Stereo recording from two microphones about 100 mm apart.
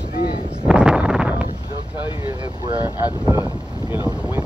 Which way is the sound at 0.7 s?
10° right (ahead or behind).